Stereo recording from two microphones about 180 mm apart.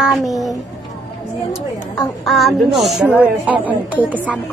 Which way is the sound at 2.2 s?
Centre (ahead or behind).